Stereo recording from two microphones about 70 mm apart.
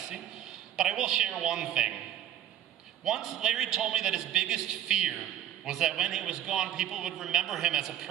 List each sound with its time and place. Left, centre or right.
0.7 s a man's voice: centre
3.0 s a man's voice: centre